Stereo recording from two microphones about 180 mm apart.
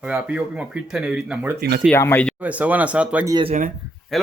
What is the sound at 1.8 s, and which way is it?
Speech, 10° left (ahead or behind).